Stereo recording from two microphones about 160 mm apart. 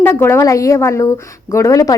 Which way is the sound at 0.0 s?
15° left (ahead or behind).